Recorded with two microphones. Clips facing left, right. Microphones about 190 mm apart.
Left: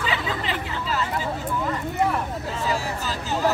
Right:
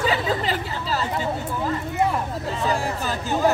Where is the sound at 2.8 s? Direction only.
55° right (ahead or behind).